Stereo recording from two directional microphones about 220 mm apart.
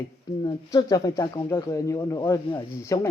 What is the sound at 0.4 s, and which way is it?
Speech, 15° left (ahead or behind).